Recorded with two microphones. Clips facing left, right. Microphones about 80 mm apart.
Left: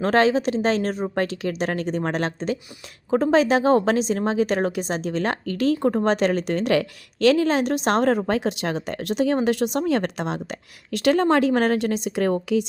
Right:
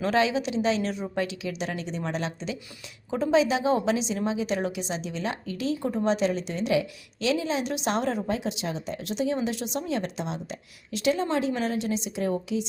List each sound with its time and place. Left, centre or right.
0.0 s a woman's voice: left